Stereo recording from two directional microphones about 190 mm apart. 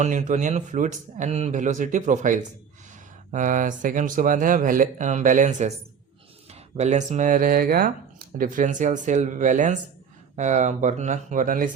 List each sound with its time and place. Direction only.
0.0 s speech: 40° right (ahead or behind)